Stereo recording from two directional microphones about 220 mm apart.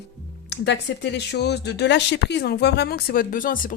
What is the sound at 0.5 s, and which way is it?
Speech, 50° left (ahead or behind).